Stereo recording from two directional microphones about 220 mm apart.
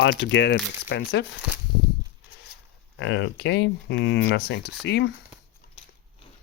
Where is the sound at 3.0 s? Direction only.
55° left (ahead or behind).